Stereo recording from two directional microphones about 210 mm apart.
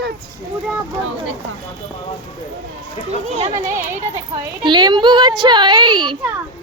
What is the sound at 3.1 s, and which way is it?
Speech, 30° right (ahead or behind).